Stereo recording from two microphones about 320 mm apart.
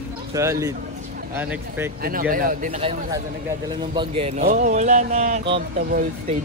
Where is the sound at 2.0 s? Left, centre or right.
Right.